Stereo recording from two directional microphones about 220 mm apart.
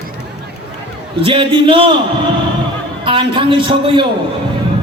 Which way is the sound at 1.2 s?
25° right (ahead or behind).